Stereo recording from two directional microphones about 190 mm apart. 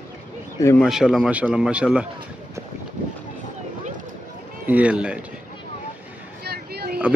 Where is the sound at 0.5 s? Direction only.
15° left (ahead or behind).